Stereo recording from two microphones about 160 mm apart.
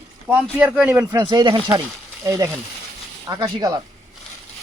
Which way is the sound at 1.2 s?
30° right (ahead or behind).